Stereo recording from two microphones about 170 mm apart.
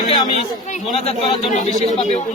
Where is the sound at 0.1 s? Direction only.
30° left (ahead or behind).